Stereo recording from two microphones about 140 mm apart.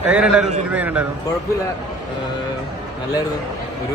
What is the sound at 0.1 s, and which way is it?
Speech, 5° right (ahead or behind).